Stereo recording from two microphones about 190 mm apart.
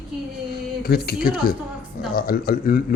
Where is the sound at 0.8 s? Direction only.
55° left (ahead or behind).